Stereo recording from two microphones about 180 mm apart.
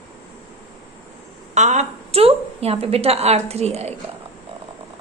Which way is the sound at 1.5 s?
40° right (ahead or behind).